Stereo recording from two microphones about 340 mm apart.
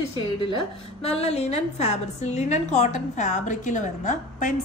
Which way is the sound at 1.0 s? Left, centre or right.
Centre.